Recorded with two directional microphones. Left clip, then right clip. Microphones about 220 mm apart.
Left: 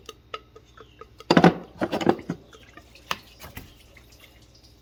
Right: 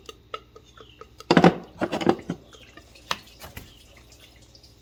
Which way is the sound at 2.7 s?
Centre (ahead or behind).